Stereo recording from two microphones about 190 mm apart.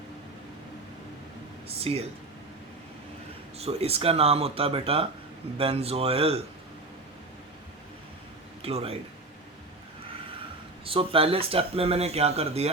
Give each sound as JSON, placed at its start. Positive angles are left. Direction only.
{"t": 1.6, "sound": "speech", "side_deg": -30}
{"t": 3.6, "sound": "speech", "side_deg": -30}
{"t": 8.6, "sound": "speech", "side_deg": -30}
{"t": 10.8, "sound": "speech", "side_deg": -30}